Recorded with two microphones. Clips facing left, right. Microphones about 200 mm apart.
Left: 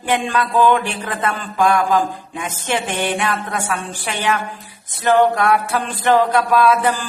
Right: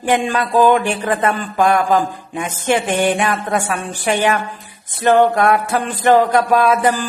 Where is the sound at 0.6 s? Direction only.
45° right (ahead or behind).